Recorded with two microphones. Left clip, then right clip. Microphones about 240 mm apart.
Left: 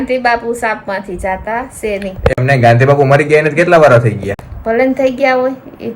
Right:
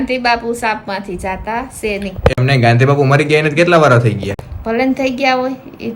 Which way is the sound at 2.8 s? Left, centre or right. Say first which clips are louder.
Left 3 dB; centre.